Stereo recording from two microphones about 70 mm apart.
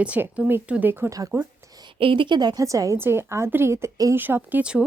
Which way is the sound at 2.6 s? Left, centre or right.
Right.